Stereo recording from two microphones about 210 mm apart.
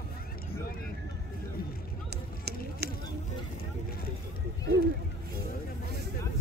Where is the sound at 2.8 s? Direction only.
50° right (ahead or behind).